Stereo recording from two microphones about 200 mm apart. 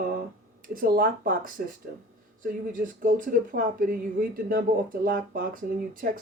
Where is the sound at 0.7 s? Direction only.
45° right (ahead or behind).